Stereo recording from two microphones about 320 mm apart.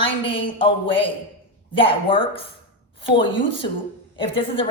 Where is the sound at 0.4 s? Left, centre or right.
Centre.